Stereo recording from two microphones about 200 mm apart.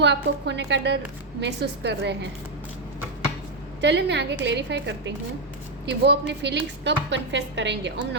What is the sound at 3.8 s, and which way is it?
A woman's voice, 60° right (ahead or behind).